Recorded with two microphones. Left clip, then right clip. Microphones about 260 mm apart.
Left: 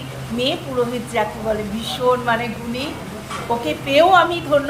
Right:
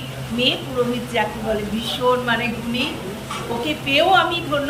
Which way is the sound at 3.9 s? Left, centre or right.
Centre.